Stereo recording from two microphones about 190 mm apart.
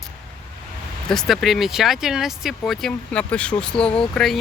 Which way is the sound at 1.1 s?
Centre (ahead or behind).